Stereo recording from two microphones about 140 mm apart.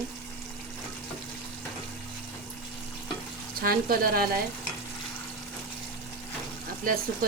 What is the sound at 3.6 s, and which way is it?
Speech, 90° right.